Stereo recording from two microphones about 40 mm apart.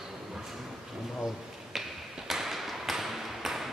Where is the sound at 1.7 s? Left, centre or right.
Centre.